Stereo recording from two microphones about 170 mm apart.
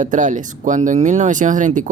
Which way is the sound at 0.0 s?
50° right (ahead or behind).